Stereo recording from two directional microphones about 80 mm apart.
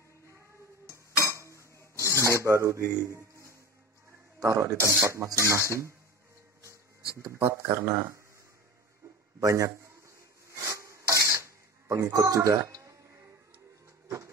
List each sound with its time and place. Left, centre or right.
1.1 s cutlery: left
1.4 s chink: right
2.0 s filing: right
4.4 s speech: right
7.2 s speech: right
9.4 s speech: right
10.0 s filing: right
11.9 s speech: right
14.0 s a sound: right